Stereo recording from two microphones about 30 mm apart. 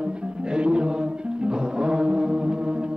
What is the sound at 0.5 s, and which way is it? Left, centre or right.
Music, right.